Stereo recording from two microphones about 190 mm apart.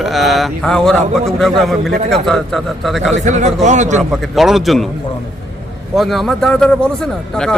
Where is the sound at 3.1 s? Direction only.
40° right (ahead or behind).